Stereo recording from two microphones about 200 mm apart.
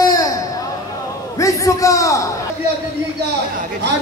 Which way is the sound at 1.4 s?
15° left (ahead or behind).